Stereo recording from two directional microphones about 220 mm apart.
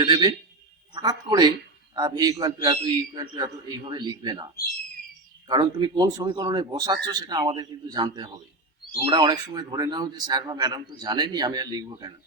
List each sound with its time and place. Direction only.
0.0 s a man's voice: 20° right (ahead or behind)
5.5 s speech: 20° right (ahead or behind)